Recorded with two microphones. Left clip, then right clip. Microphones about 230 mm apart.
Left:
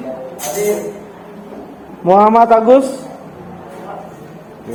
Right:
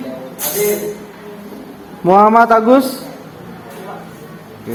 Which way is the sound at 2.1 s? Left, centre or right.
Right.